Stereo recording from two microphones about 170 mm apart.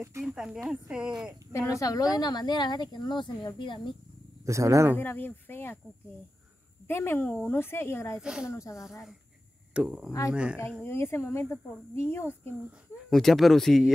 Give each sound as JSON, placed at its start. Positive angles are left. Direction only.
{"t": 0.2, "sound": "speech", "side_deg": -5}
{"t": 1.5, "sound": "speech", "side_deg": 20}
{"t": 4.5, "sound": "speech", "side_deg": -20}
{"t": 4.9, "sound": "speech", "side_deg": 10}
{"t": 6.9, "sound": "speech", "side_deg": 15}
{"t": 8.2, "sound": "speech", "side_deg": -5}
{"t": 8.5, "sound": "speech", "side_deg": 20}
{"t": 8.7, "sound": "speech", "side_deg": 0}
{"t": 10.8, "sound": "speech", "side_deg": 15}
{"t": 13.1, "sound": "speech", "side_deg": 0}